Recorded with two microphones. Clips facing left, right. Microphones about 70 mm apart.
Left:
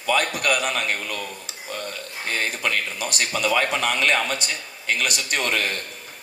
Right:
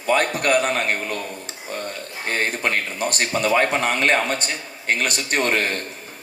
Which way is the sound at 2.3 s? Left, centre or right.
Right.